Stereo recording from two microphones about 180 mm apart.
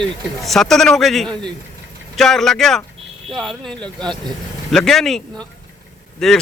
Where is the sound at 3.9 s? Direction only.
25° right (ahead or behind).